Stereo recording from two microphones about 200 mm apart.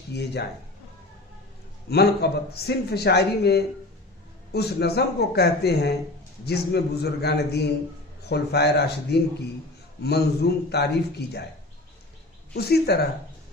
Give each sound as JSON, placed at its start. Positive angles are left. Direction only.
{"t": 0.1, "sound": "a man's voice", "side_deg": 55}
{"t": 1.9, "sound": "a man's voice", "side_deg": 55}
{"t": 12.5, "sound": "a man's voice", "side_deg": 55}